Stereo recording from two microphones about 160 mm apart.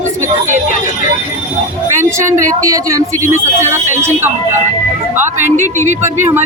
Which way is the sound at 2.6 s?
20° right (ahead or behind).